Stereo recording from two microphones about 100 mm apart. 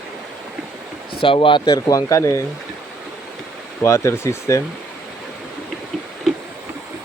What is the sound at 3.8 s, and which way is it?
Speech, 25° left (ahead or behind).